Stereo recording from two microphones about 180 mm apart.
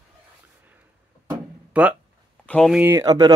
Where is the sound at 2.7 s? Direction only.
15° right (ahead or behind).